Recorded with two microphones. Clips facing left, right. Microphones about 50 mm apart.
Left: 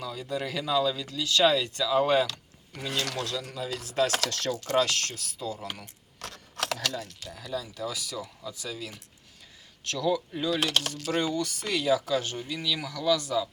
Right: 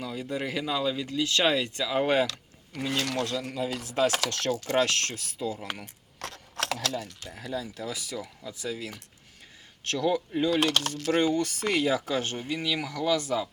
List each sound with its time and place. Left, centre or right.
0.0 s speech: right
7.3 s speech: right
10.6 s speech: right